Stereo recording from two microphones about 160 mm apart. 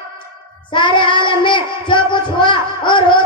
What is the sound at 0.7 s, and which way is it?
Child singing, 30° left (ahead or behind).